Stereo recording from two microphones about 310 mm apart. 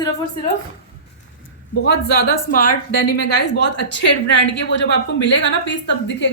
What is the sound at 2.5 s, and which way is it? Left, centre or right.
A woman's voice, left.